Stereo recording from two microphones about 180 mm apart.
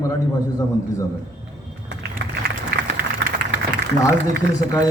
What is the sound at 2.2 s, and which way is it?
Run, 85° right.